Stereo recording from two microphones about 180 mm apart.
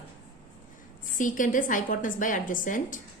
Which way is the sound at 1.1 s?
45° left (ahead or behind).